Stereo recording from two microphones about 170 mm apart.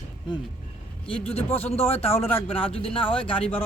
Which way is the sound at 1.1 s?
35° left (ahead or behind).